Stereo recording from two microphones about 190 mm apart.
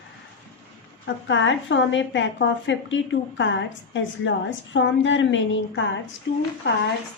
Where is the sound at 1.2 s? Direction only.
75° left (ahead or behind).